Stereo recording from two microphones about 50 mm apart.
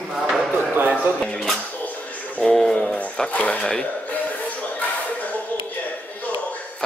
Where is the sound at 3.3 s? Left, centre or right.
Left.